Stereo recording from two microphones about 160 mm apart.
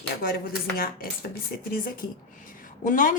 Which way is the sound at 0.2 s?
70° left (ahead or behind).